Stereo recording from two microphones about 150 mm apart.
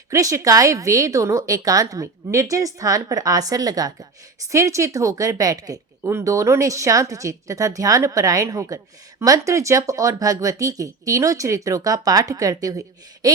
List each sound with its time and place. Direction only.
0.1 s speech: 20° right (ahead or behind)